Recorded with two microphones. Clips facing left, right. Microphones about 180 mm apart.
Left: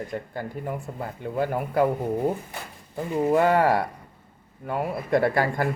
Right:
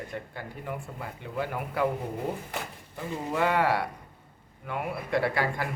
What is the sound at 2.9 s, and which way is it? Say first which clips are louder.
A man's voice: left 10 dB; 40° left (ahead or behind).